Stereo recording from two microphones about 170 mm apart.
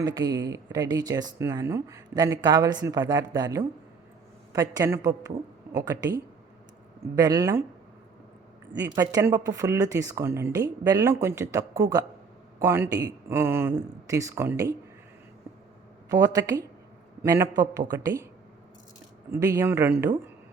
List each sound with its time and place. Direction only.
0.0 s speech: 25° right (ahead or behind)
8.8 s speech: 15° right (ahead or behind)
16.0 s speech: 20° right (ahead or behind)
19.3 s speech: 15° right (ahead or behind)